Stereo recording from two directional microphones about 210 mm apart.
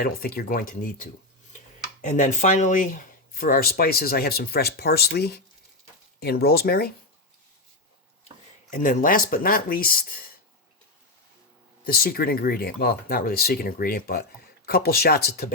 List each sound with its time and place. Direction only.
0.0 s speech: 45° left (ahead or behind)
8.7 s speech: 40° left (ahead or behind)
11.9 s speech: 45° left (ahead or behind)